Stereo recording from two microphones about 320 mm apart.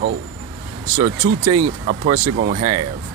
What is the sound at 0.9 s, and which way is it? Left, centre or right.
Speech, centre.